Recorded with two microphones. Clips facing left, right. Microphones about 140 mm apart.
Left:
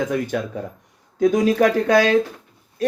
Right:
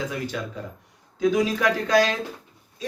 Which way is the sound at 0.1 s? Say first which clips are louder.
Left 7 dB; 55° left (ahead or behind).